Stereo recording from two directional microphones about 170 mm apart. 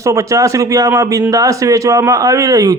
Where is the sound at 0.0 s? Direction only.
20° right (ahead or behind).